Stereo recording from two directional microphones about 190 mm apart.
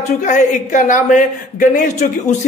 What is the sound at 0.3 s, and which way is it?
A man's voice, 40° left (ahead or behind).